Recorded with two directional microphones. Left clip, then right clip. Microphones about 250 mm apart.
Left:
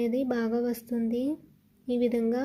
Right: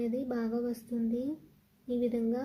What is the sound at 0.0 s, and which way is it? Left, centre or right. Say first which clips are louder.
Speech: left 6 dB; centre.